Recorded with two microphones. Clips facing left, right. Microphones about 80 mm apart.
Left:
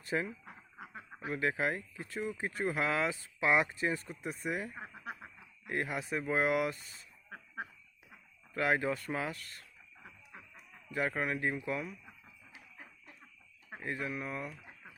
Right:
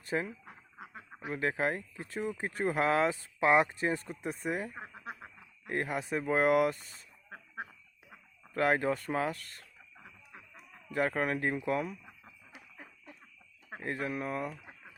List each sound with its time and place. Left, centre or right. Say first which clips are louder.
0.0 s speech: right 1 dB; right
1.3 s speech: right 1 dB; right
4.7 s speech: right 1 dB; centre
5.6 s speech: right 2 dB; right
8.5 s speech: right 3 dB; right
10.0 s chicken: even; centre
11.2 s speech: right 3 dB; right
13.7 s speech: right 3 dB; right